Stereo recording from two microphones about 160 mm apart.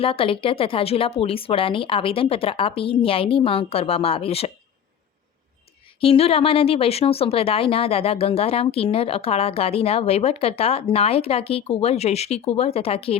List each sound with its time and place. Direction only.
0.0 s a woman's voice: 35° left (ahead or behind)
6.0 s a woman's voice: 35° left (ahead or behind)